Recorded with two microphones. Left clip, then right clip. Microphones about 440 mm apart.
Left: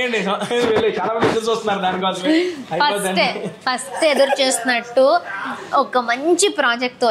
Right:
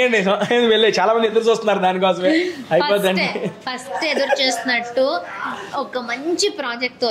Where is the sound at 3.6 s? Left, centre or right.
Left.